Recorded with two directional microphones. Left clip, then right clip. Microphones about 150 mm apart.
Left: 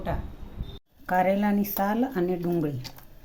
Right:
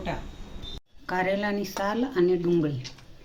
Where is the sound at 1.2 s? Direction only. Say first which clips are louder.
Left 2 dB; 80° left.